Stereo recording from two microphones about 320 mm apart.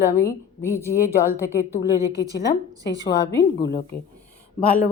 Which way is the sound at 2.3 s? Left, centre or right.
Left.